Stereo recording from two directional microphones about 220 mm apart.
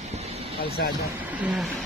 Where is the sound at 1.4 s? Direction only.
5° right (ahead or behind).